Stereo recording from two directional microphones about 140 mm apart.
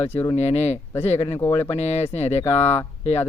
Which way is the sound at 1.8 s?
50° left (ahead or behind).